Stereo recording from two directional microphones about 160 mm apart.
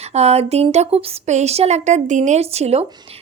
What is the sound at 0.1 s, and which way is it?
Speech, 40° right (ahead or behind).